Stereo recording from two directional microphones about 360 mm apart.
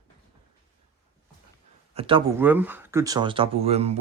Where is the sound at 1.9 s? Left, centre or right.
Centre.